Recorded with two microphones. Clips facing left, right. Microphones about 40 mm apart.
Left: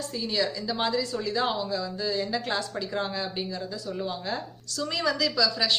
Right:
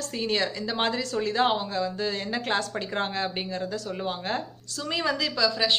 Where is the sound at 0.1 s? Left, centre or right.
Right.